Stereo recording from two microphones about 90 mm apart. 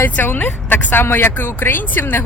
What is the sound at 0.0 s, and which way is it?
Speech, 20° left (ahead or behind).